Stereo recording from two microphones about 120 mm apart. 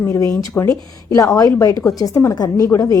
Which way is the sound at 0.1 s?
30° left (ahead or behind).